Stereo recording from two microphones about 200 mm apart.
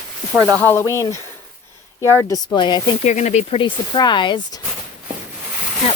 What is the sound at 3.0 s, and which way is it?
Speech, 35° left (ahead or behind).